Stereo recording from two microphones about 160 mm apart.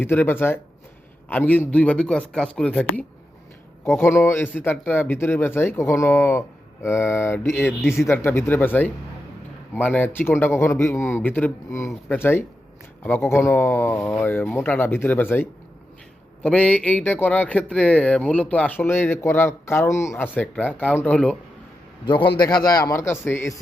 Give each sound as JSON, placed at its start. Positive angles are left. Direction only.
{"t": 0.0, "sound": "speech", "side_deg": 15}
{"t": 22.0, "sound": "a man's voice", "side_deg": 30}